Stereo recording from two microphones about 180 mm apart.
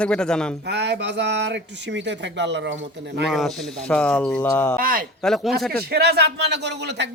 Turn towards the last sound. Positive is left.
turn(degrees=-70)  # may be behind; listen again after turning